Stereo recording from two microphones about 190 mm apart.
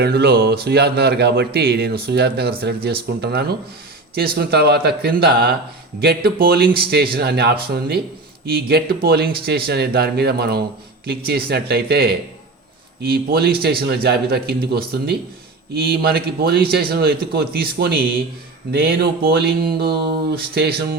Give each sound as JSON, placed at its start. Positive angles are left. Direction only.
{"t": 0.0, "sound": "speech", "side_deg": -55}